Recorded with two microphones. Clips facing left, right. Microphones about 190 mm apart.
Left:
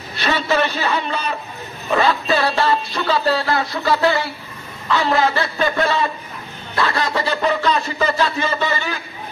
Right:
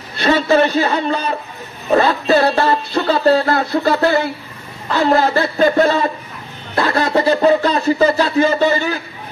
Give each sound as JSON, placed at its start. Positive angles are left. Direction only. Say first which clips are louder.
{"t": 0.3, "sound": "music", "louder": "right 6 dB", "side_deg": -45}
{"t": 6.8, "sound": "a sound", "louder": "right 4 dB", "side_deg": -40}
{"t": 7.2, "sound": "speech", "louder": "right 10 dB", "side_deg": -40}